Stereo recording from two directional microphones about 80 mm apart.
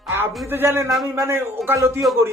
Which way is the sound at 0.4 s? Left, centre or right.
Right.